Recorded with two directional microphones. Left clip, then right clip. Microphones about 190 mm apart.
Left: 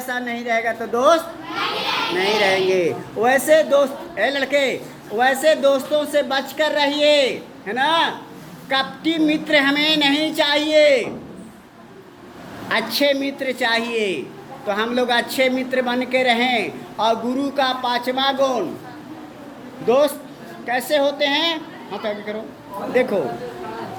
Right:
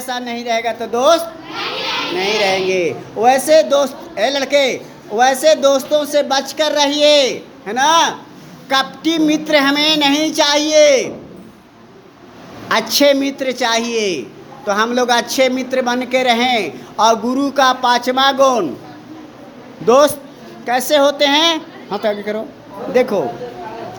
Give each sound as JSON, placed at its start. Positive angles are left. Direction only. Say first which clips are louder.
{"t": 0.1, "sound": "a man's voice", "louder": "right 3 dB", "side_deg": -10}
{"t": 2.1, "sound": "a man's voice", "louder": "right 2 dB", "side_deg": -15}
{"t": 2.6, "sound": "a man's voice", "louder": "right 2 dB", "side_deg": 0}
{"t": 12.6, "sound": "a woman's voice", "louder": "right 6 dB", "side_deg": -25}
{"t": 19.9, "sound": "a woman's voice", "louder": "right 6 dB", "side_deg": -30}